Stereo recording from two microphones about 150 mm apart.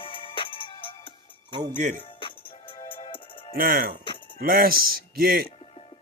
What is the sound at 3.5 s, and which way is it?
Speech, 75° right (ahead or behind).